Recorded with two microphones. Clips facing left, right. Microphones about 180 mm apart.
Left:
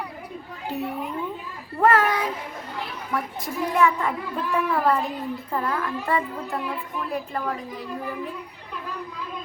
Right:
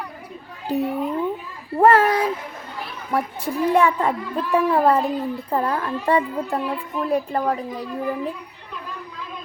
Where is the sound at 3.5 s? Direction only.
35° right (ahead or behind).